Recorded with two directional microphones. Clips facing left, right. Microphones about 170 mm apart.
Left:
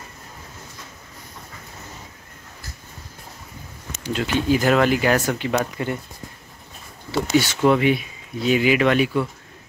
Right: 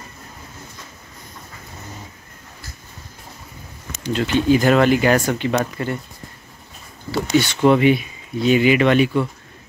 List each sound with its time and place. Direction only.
4.0 s speech: 5° left (ahead or behind)
7.3 s speech: 5° left (ahead or behind)